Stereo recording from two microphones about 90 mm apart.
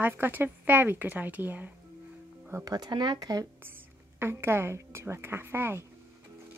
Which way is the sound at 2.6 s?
50° right (ahead or behind).